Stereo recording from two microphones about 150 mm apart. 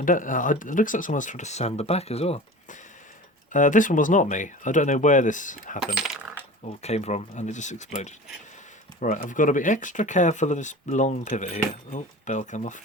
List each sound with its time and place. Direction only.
0.0 s speech: 60° left (ahead or behind); by 2.7 s 45° left (ahead or behind)
3.5 s speech: 55° left (ahead or behind)
5.8 s coin: 5° right (ahead or behind)
6.7 s speech: 45° left (ahead or behind)